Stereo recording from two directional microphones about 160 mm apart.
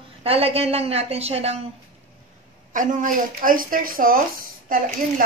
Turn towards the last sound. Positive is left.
turn(degrees=-60)  # may be behind; listen again after turning